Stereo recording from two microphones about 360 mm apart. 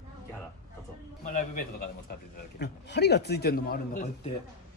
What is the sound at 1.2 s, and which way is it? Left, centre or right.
Speech, left.